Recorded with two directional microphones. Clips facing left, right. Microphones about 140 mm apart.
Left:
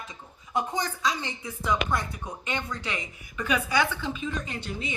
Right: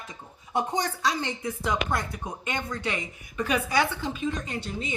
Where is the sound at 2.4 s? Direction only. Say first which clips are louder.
Right 2 dB; 45° right (ahead or behind).